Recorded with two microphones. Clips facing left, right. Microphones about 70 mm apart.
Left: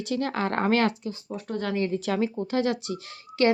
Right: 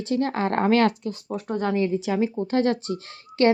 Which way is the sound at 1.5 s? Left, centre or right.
Right.